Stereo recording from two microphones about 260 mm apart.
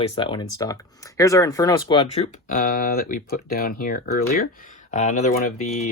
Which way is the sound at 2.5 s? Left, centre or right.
Left.